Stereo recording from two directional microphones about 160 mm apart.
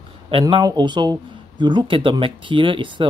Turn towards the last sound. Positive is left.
turn(degrees=-30)  # may be behind; listen again after turning